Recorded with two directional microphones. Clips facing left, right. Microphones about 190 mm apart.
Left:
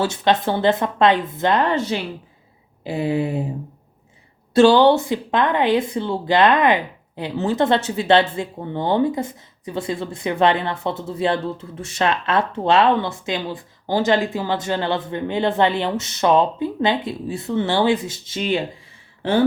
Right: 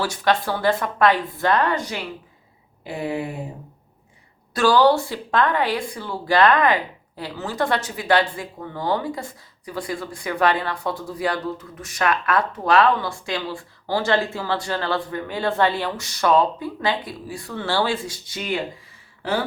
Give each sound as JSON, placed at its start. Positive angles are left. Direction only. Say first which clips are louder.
{"t": 0.0, "sound": "speech", "louder": "left 3 dB", "side_deg": 25}
{"t": 4.5, "sound": "speech", "louder": "left 4 dB", "side_deg": 25}